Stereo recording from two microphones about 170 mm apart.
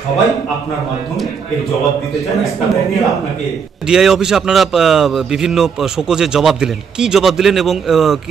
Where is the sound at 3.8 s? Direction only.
5° right (ahead or behind).